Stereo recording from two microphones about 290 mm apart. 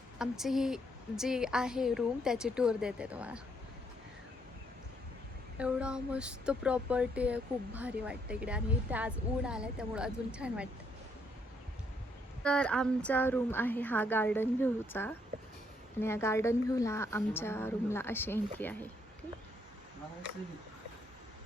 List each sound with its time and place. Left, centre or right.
0.2 s speech: centre
5.5 s speech: centre
12.4 s a woman's voice: centre